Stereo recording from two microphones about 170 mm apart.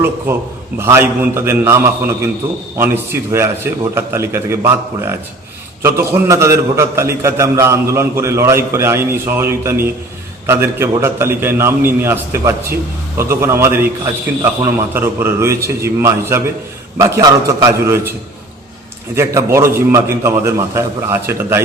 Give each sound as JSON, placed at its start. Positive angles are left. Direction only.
{"t": 0.3, "sound": "a man's voice", "side_deg": -10}
{"t": 19.1, "sound": "a man's voice", "side_deg": -15}